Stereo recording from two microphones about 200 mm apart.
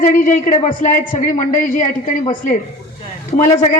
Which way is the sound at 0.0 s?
40° left (ahead or behind).